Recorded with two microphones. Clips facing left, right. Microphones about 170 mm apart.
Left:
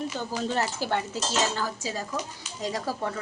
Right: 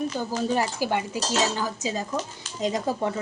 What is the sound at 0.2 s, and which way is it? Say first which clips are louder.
A woman's voice: right 2 dB; 10° right (ahead or behind).